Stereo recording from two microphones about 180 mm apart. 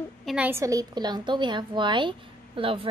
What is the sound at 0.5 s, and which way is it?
A woman's voice, 15° right (ahead or behind).